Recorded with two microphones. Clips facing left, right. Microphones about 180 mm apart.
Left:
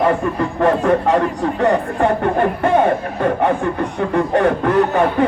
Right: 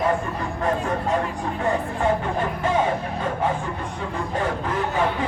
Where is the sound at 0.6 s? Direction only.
70° left (ahead or behind).